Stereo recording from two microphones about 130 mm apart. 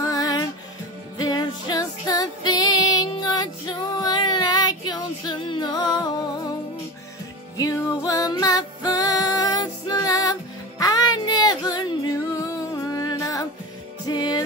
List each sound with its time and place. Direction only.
0.0 s music: 25° left (ahead or behind)
7.5 s music: 30° left (ahead or behind)
10.8 s female singing: 30° left (ahead or behind)
14.0 s music: 30° left (ahead or behind)